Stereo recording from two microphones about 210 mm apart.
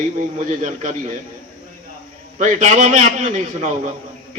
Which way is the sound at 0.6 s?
35° right (ahead or behind).